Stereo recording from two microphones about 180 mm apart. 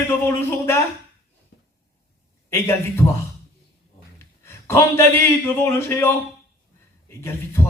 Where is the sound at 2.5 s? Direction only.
15° left (ahead or behind).